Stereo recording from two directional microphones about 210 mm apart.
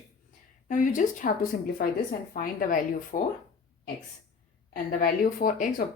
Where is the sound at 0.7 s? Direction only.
35° left (ahead or behind).